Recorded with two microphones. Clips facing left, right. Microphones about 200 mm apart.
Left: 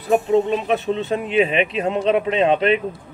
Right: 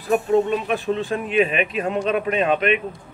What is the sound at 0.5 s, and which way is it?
Speech, 25° left (ahead or behind).